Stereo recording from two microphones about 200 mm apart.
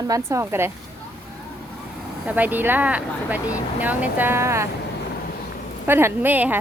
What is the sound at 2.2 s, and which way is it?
A woman's voice, 10° right (ahead or behind).